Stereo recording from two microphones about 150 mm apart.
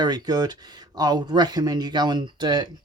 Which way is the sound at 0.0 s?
25° right (ahead or behind).